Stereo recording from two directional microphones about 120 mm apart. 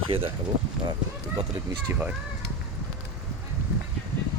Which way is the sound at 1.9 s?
10° right (ahead or behind).